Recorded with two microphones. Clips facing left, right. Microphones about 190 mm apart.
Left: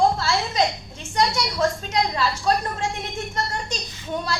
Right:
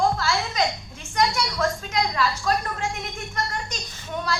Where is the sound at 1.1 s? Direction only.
30° left (ahead or behind).